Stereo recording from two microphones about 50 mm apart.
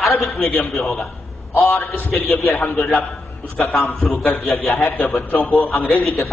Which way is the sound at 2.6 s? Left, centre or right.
Left.